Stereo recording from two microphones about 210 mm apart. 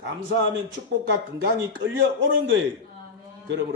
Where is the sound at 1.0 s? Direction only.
55° right (ahead or behind).